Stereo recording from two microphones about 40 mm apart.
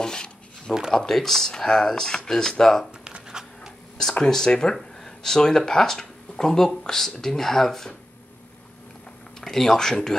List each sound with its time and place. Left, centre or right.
0.0 s a sound: centre
0.9 s speech: centre
3.0 s writing: centre
4.2 s speech: centre
9.4 s speech: centre